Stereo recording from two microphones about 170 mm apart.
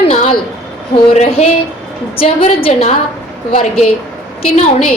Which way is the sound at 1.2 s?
35° left (ahead or behind).